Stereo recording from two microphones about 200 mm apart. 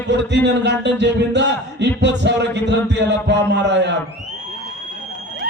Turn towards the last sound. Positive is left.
turn(degrees=-60)  # may be behind; listen again after turning